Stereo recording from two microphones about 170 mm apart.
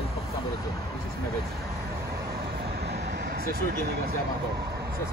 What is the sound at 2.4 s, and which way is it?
Vehicle, 65° right (ahead or behind).